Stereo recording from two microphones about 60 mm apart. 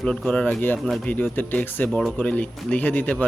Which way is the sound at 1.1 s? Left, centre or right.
Left.